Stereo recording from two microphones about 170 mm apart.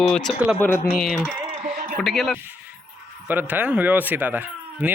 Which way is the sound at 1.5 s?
50° right (ahead or behind).